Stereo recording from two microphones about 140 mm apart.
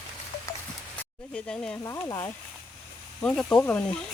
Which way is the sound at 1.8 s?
20° left (ahead or behind).